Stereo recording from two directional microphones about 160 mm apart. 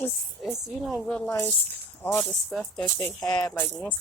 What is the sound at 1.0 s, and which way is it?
Speech, 5° left (ahead or behind).